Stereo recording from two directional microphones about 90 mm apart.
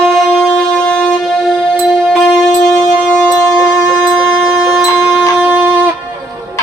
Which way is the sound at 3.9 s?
15° right (ahead or behind).